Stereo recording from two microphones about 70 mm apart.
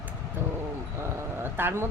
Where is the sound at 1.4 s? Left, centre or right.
Right.